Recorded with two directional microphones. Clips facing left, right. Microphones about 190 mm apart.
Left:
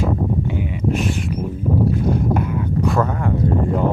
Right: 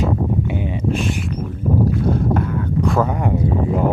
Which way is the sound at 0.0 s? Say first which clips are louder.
Right 1 dB; 25° right (ahead or behind).